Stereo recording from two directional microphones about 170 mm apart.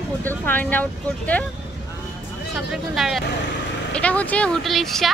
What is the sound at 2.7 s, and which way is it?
Speech, centre (ahead or behind).